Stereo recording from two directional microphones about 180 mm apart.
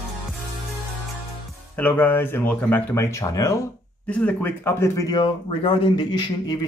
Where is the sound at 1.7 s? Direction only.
10° left (ahead or behind).